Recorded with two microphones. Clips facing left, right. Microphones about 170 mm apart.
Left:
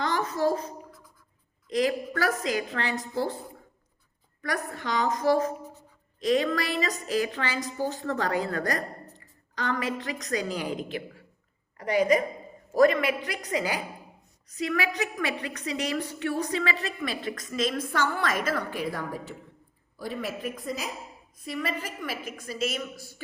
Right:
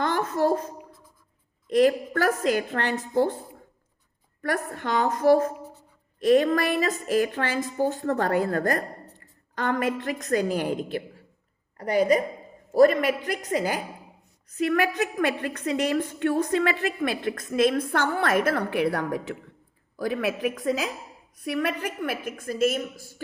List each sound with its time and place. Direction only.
0.0 s a sound: 55° right (ahead or behind)
1.7 s a woman's voice: 50° right (ahead or behind)
4.4 s a woman's voice: 45° right (ahead or behind); by 19.4 s 80° right
20.0 s a woman's voice: 90° right
21.3 s a woman's voice: 70° right (ahead or behind); by 23.2 s 45° right (ahead or behind)